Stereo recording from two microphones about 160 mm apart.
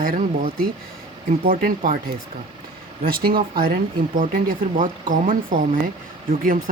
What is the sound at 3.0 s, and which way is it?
Speech, 65° right (ahead or behind).